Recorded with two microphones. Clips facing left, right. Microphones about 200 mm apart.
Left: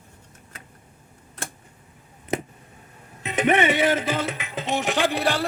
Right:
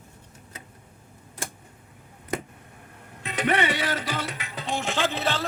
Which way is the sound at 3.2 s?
20° left (ahead or behind).